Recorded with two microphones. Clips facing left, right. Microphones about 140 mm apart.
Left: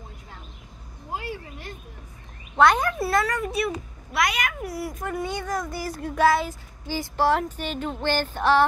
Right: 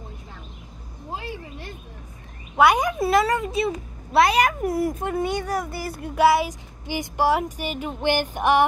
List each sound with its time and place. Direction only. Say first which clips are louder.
2.5 s a child's voice: right 1 dB; 10° right (ahead or behind); by 4.9 s 45° right (ahead or behind)
4.9 s a child's voice: right 4 dB; 30° right (ahead or behind)
5.2 s speech: right 2 dB; 10° right (ahead or behind)